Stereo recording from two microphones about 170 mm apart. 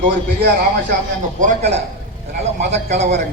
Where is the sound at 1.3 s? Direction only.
45° right (ahead or behind).